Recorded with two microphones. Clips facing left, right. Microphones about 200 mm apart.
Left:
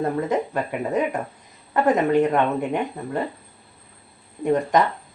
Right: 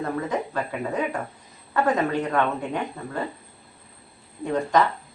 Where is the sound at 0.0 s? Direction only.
20° left (ahead or behind).